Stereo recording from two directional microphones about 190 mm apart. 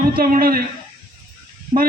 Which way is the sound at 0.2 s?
50° right (ahead or behind).